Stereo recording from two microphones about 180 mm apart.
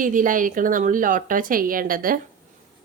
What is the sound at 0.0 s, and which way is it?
A woman's voice, 50° right (ahead or behind).